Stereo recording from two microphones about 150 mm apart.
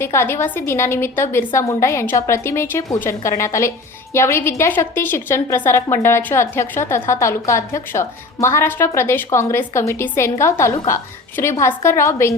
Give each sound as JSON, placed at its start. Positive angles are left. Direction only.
{"t": 0.0, "sound": "a woman's voice", "side_deg": 15}